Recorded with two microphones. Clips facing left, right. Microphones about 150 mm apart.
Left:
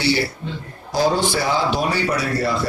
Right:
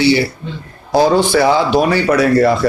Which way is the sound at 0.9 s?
65° right (ahead or behind).